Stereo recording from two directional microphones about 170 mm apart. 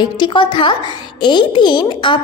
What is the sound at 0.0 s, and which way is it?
A woman's voice, 30° left (ahead or behind).